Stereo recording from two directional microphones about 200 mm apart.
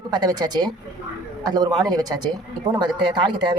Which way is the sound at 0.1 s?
20° right (ahead or behind).